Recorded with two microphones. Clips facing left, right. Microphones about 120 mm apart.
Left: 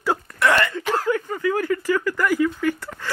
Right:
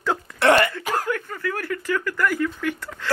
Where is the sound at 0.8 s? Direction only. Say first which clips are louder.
Left 2 dB; 10° right (ahead or behind).